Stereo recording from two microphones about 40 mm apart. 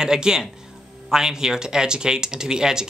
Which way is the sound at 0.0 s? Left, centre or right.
Centre.